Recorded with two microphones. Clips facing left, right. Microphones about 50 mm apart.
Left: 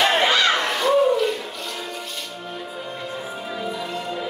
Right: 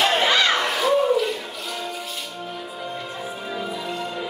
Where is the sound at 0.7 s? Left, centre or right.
Centre.